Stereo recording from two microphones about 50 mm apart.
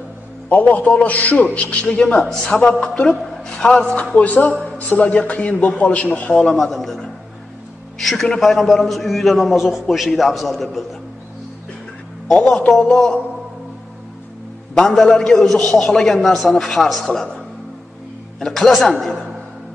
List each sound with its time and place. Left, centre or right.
0.5 s a man's voice: left
4.2 s a man's voice: left
6.3 s a man's voice: centre
12.4 s a man's voice: centre
14.7 s a man's voice: centre
18.4 s a man's voice: centre